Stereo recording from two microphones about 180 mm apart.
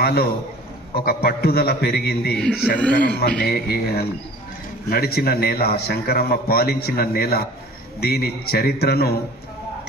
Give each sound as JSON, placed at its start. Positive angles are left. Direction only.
{"t": 0.0, "sound": "a man's voice", "side_deg": 60}
{"t": 2.8, "sound": "a man's voice", "side_deg": 10}
{"t": 3.4, "sound": "a man's voice", "side_deg": 65}